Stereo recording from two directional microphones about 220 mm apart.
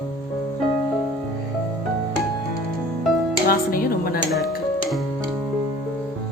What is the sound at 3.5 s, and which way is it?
Music, 40° left (ahead or behind).